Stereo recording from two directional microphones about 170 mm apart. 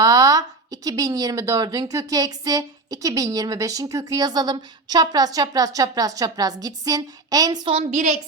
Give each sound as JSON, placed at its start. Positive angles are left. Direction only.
{"t": 0.0, "sound": "speech", "side_deg": -20}
{"t": 7.8, "sound": "a woman's voice", "side_deg": -45}